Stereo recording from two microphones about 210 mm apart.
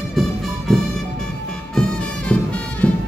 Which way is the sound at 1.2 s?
5° left (ahead or behind).